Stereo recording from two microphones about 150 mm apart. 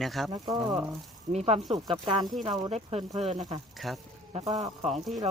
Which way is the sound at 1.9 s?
30° right (ahead or behind).